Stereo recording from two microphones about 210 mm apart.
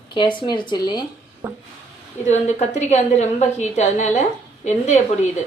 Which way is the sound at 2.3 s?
30° left (ahead or behind).